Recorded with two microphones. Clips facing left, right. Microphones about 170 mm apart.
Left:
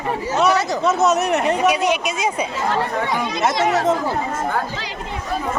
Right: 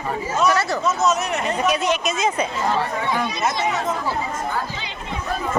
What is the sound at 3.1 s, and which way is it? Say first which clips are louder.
Speech: left 2 dB; 80° left.